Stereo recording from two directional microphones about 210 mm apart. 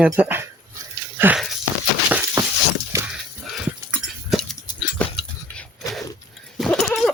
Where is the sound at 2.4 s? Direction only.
15° right (ahead or behind).